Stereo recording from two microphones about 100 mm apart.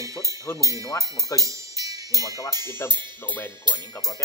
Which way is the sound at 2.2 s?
35° left (ahead or behind).